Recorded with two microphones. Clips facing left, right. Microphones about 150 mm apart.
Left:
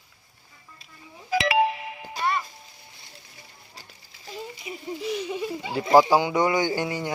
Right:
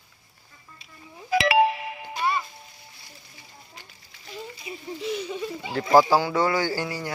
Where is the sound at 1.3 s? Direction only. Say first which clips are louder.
Right 2 dB; 65° right (ahead or behind).